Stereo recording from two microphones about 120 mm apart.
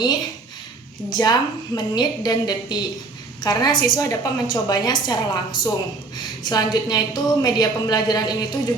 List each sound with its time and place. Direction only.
1.1 s a woman's voice: 35° left (ahead or behind)